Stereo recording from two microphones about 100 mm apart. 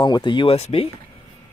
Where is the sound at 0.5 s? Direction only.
80° left.